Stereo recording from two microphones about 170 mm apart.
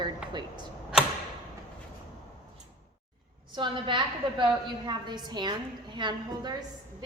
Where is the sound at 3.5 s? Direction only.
30° right (ahead or behind).